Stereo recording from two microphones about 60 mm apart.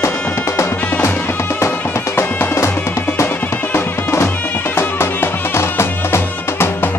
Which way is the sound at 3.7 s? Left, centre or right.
Left.